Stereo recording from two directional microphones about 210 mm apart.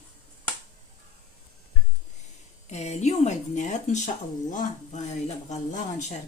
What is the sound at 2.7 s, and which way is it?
Speech, 30° left (ahead or behind).